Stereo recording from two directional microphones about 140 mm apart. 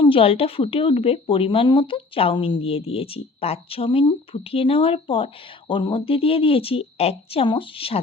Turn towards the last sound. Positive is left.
turn(degrees=40)  # may be behind; listen again after turning